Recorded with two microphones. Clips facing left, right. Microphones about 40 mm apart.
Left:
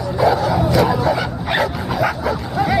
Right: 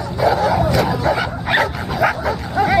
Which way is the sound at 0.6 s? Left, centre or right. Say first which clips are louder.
Left 1 dB; centre.